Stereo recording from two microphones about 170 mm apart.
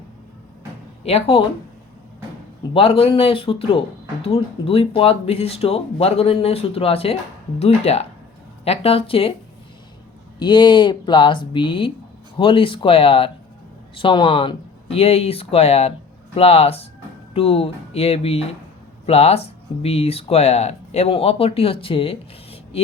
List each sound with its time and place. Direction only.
1.0 s speech: 35° left (ahead or behind)
2.7 s speech: 35° left (ahead or behind)
10.4 s speech: 25° left (ahead or behind)